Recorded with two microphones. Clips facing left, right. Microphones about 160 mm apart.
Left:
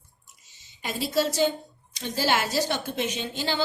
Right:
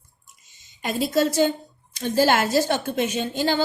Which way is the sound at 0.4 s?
50° right (ahead or behind).